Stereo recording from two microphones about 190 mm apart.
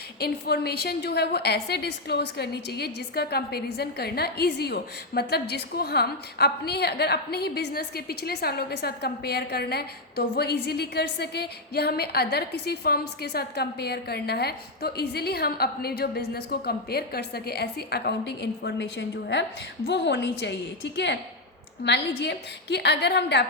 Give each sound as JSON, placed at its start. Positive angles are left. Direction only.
{"t": 0.2, "sound": "a woman's voice", "side_deg": 55}